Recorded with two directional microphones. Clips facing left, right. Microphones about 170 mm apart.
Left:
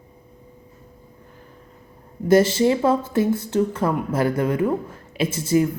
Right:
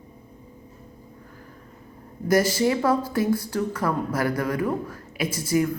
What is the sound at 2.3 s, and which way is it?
Speech, 25° left (ahead or behind).